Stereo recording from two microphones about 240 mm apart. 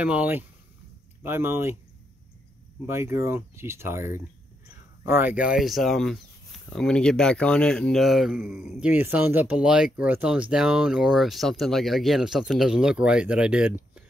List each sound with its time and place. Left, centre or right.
0.0 s speech: centre
2.9 s speech: centre